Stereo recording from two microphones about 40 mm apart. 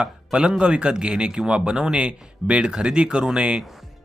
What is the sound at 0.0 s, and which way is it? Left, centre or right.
Speech, right.